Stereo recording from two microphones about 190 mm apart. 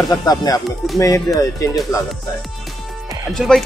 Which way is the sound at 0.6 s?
Centre (ahead or behind).